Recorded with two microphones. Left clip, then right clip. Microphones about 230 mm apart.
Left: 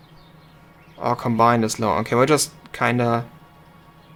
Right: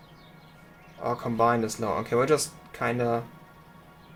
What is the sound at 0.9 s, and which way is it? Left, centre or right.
Speech, left.